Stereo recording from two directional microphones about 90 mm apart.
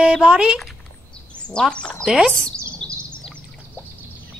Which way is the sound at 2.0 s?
10° right (ahead or behind).